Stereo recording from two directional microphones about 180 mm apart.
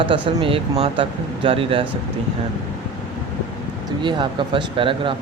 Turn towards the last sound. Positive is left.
turn(degrees=-30)  # may be behind; listen again after turning